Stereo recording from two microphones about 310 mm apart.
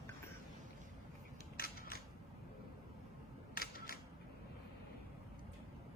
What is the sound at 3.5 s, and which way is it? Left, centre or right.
Camera, left.